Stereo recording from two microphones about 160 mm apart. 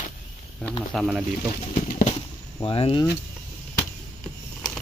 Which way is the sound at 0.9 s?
Centre (ahead or behind).